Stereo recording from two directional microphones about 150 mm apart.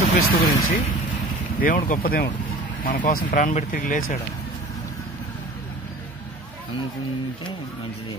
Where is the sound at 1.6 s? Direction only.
70° left (ahead or behind).